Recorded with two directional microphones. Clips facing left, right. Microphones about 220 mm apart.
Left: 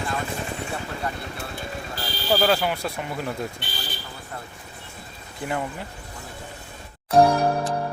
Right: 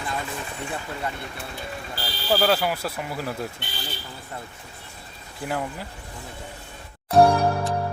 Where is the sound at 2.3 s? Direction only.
5° right (ahead or behind).